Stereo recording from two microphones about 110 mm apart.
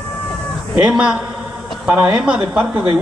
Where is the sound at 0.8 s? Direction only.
5° right (ahead or behind).